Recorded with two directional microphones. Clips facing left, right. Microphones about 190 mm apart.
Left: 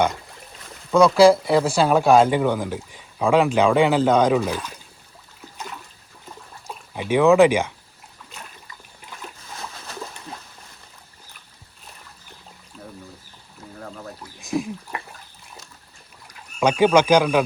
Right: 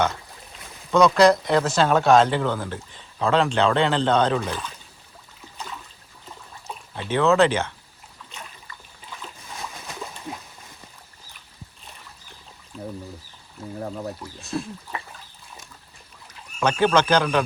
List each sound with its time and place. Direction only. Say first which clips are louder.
0.9 s speech: left 3 dB; 10° left (ahead or behind)
6.9 s speech: left 4 dB; 10° left (ahead or behind)
10.3 s a sound: right 3 dB; 20° right (ahead or behind)
13.7 s speech: right 6 dB; 25° right (ahead or behind)
14.3 s speech: left 9 dB; 15° left (ahead or behind)
16.2 s speech: left 3 dB; 15° left (ahead or behind)